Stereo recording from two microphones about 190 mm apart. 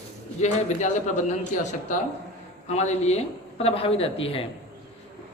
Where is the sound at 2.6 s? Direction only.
35° left (ahead or behind).